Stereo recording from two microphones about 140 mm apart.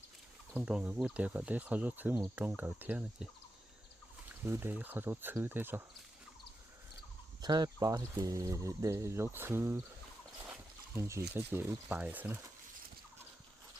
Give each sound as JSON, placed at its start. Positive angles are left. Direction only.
{"t": 0.5, "sound": "speech", "side_deg": -10}
{"t": 4.3, "sound": "speech", "side_deg": -15}
{"t": 7.4, "sound": "speech", "side_deg": -30}